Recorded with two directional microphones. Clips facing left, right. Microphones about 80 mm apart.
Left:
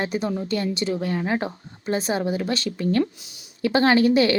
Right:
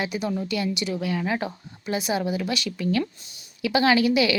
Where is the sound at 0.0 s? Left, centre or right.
Left.